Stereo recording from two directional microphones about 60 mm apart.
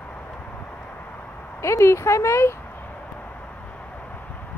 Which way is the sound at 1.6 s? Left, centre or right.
Left.